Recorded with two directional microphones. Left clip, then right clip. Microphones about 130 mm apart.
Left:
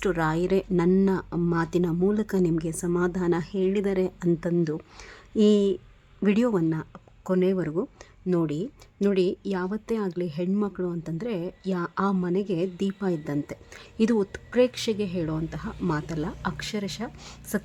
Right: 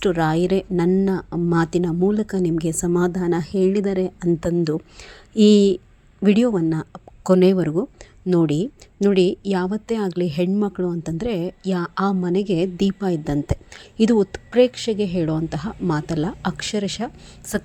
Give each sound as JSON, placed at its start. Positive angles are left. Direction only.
{"t": 0.0, "sound": "speech", "side_deg": -20}
{"t": 3.1, "sound": "speech", "side_deg": -20}
{"t": 3.8, "sound": "speech", "side_deg": -15}
{"t": 6.2, "sound": "speech", "side_deg": -15}
{"t": 6.7, "sound": "a sound", "side_deg": -35}
{"t": 7.5, "sound": "speech", "side_deg": -25}
{"t": 14.0, "sound": "speech", "side_deg": -20}